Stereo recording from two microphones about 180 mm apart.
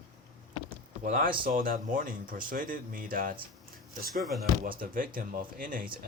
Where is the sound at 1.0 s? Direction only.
50° right (ahead or behind).